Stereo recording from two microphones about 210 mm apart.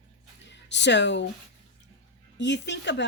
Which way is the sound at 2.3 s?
55° left (ahead or behind).